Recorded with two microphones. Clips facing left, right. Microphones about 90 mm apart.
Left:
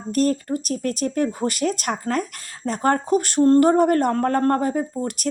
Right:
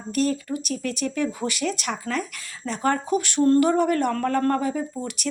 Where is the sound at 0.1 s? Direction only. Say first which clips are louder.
Left 3 dB; 45° left (ahead or behind).